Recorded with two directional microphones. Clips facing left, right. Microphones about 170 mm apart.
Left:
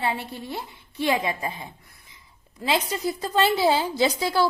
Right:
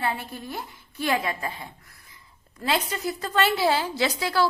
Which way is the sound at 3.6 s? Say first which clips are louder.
Left 2 dB; 15° left (ahead or behind).